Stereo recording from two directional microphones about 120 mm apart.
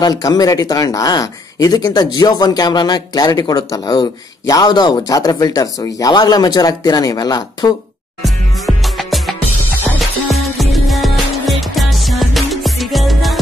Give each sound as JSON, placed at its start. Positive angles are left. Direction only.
{"t": 0.0, "sound": "speech", "side_deg": 30}
{"t": 8.2, "sound": "music", "side_deg": 0}